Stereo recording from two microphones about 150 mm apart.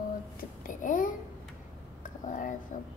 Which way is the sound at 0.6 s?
65° left (ahead or behind).